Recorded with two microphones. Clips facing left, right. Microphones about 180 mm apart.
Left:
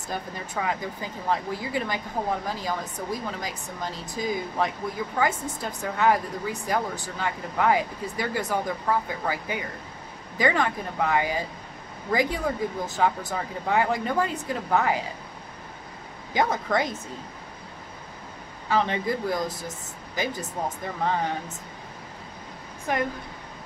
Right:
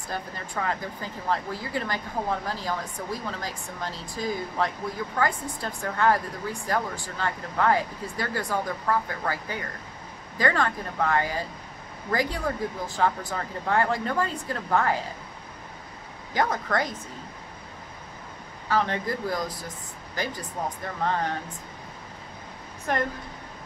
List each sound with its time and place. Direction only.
0.1 s speech: 15° left (ahead or behind)
13.3 s speech: 10° left (ahead or behind)
16.3 s speech: 20° left (ahead or behind)
18.7 s speech: 20° left (ahead or behind)